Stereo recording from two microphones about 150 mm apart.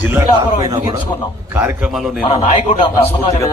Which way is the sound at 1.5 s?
15° right (ahead or behind).